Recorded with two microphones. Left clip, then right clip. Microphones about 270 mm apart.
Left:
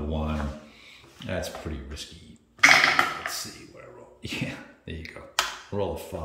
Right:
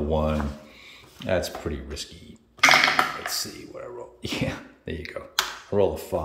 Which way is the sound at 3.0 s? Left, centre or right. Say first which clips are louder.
Right 1 dB; right.